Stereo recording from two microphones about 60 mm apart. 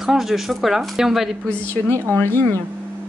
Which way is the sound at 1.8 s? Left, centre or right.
Left.